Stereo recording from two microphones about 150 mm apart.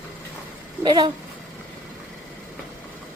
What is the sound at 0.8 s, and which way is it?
Speech, 30° right (ahead or behind).